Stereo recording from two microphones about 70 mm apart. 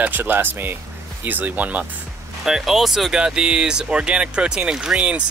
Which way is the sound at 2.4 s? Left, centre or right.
Centre.